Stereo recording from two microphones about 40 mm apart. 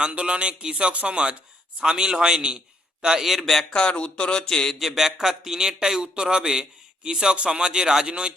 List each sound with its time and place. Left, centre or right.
0.0 s a man's voice: right
3.2 s a man's voice: centre
3.7 s speech: left
4.8 s a man's voice: centre